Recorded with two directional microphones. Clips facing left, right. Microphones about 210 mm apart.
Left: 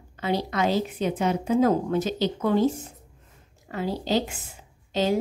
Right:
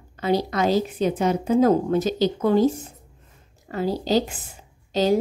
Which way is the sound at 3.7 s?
40° right (ahead or behind).